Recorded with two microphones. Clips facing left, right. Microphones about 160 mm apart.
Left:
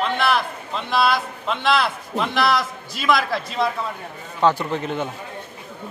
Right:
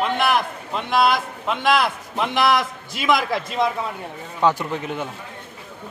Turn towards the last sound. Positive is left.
turn(degrees=-10)  # may be behind; listen again after turning